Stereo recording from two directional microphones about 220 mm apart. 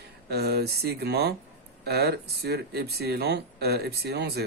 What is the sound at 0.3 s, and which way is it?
Speech, 45° right (ahead or behind).